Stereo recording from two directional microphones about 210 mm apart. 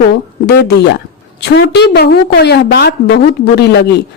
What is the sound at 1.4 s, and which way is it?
A woman's voice, 55° left (ahead or behind).